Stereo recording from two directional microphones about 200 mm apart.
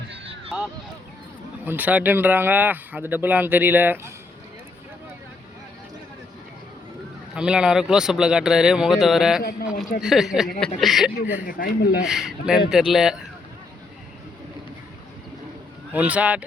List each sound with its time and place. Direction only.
0.1 s a sound: 25° right (ahead or behind)
1.6 s speech: 10° right (ahead or behind)
7.3 s speech: 5° right (ahead or behind)
9.4 s a man's voice: 50° left (ahead or behind)
10.0 s speech: centre (ahead or behind)
11.4 s a man's voice: 45° left (ahead or behind)
12.0 s speech: 5° right (ahead or behind)
15.9 s speech: 5° right (ahead or behind)